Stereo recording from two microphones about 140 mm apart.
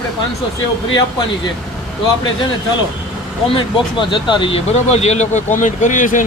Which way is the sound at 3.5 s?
35° left (ahead or behind).